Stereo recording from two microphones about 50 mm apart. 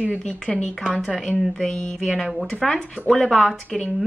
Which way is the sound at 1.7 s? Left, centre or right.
Left.